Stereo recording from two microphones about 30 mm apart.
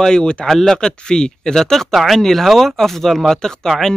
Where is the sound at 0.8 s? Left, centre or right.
Left.